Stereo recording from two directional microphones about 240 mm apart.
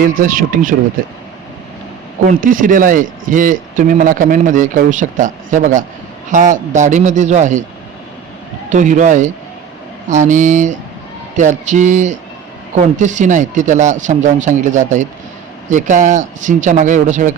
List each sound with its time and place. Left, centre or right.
0.0 s speech: right
2.2 s a man's voice: right
8.7 s a man's voice: right